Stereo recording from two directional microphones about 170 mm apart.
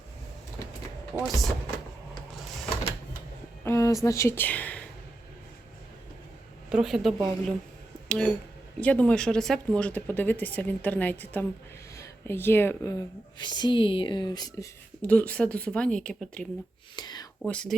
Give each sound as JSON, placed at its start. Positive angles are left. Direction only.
{"t": 1.2, "sound": "speech", "side_deg": 0}
{"t": 3.6, "sound": "speech", "side_deg": 15}
{"t": 6.7, "sound": "speech", "side_deg": -5}
{"t": 8.0, "sound": "a sound", "side_deg": 5}
{"t": 8.8, "sound": "speech", "side_deg": 10}
{"t": 13.4, "sound": "speech", "side_deg": 25}
{"t": 15.0, "sound": "speech", "side_deg": 10}
{"t": 16.9, "sound": "speech", "side_deg": 25}
{"t": 17.4, "sound": "speech", "side_deg": 5}